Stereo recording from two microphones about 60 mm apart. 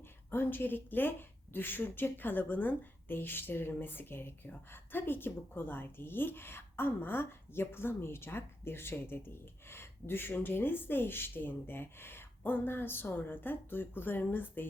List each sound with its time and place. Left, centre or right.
0.3 s speech: left